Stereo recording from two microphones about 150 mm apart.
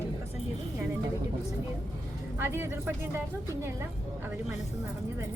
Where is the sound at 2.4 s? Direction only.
15° right (ahead or behind).